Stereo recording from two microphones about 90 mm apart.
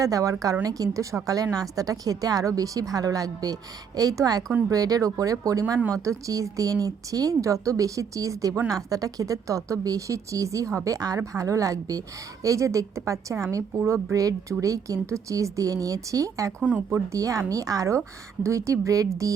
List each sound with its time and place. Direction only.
0.0 s speech: 40° right (ahead or behind)